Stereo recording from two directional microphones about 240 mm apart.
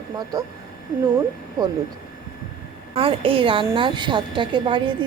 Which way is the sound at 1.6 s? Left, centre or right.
Centre.